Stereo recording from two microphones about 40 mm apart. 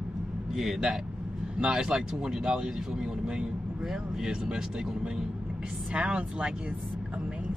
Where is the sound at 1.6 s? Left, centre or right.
Centre.